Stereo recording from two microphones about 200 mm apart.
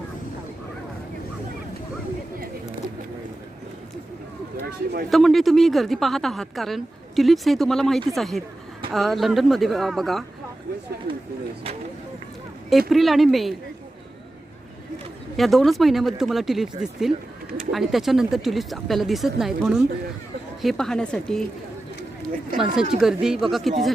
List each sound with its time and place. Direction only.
4.6 s a sound: 50° right (ahead or behind)
5.1 s speech: centre (ahead or behind)
12.9 s speech: centre (ahead or behind)
15.4 s speech: centre (ahead or behind)
22.5 s speech: centre (ahead or behind)